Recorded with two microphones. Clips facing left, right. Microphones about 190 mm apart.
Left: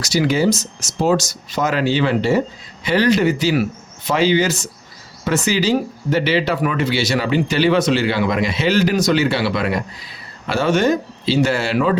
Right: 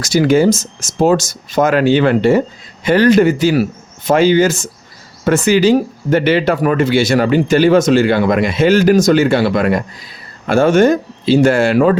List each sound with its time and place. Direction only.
0.0 s speech: 50° right (ahead or behind)